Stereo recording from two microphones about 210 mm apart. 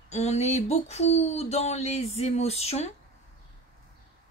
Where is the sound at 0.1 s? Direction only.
30° left (ahead or behind).